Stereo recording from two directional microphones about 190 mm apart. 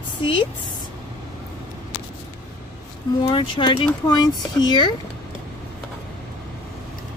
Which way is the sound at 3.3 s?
25° left (ahead or behind).